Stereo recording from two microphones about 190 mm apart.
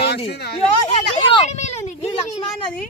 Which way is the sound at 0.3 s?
60° left (ahead or behind).